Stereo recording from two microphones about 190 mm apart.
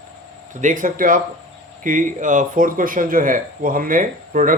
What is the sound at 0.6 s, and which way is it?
Speech, 45° right (ahead or behind).